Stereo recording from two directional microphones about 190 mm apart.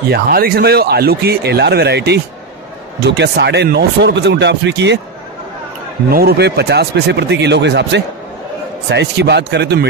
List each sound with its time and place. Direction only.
0.1 s speech: 50° right (ahead or behind)
6.0 s speech: 55° right (ahead or behind)